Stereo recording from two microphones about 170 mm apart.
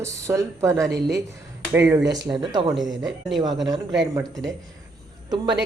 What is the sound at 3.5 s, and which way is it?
Speech, centre (ahead or behind).